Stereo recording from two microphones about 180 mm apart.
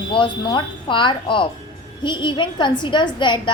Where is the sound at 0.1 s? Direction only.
25° left (ahead or behind).